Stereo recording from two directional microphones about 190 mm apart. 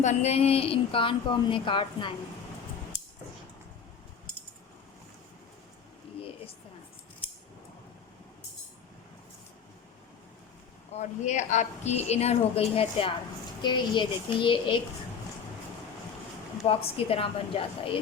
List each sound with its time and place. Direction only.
0.0 s speech: 35° left (ahead or behind)
10.9 s a woman's voice: 40° left (ahead or behind)
16.6 s speech: 30° left (ahead or behind)